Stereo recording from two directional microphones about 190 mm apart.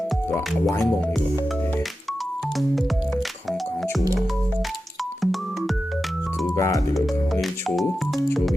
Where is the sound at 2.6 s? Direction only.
Centre (ahead or behind).